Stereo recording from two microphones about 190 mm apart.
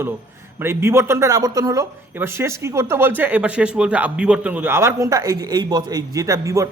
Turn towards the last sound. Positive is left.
turn(degrees=-15)  # may be behind; listen again after turning